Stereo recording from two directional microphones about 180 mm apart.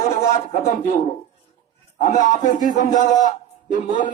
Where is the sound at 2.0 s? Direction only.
45° left (ahead or behind).